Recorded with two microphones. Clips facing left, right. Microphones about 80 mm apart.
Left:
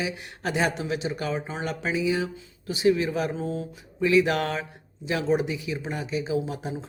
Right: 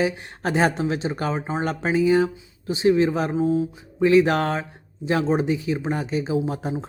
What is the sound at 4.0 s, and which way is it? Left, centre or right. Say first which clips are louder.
A man's voice: right 4 dB; right.